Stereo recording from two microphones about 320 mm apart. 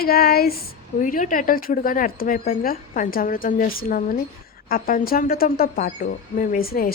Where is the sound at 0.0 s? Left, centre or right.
Left.